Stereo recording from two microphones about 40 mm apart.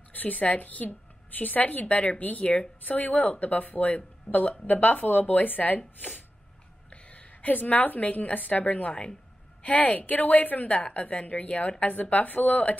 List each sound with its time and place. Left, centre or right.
0.1 s speech: left
6.9 s a woman's voice: left